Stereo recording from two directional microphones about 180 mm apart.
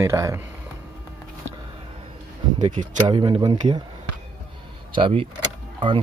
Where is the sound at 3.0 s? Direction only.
25° right (ahead or behind).